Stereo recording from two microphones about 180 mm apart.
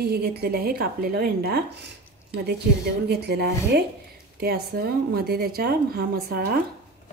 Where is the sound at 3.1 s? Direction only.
65° right (ahead or behind).